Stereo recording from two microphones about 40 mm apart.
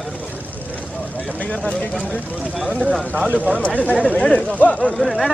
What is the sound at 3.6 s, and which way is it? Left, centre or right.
Speech, left.